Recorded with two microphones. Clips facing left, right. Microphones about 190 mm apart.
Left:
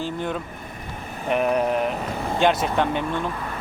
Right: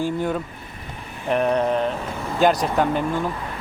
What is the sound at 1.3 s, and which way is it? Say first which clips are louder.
Speech: right 1 dB; 5° left (ahead or behind).